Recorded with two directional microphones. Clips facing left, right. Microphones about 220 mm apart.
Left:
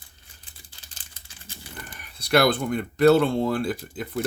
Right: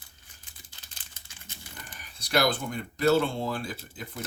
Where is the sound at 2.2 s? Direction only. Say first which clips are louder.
Left 6 dB; 60° left (ahead or behind).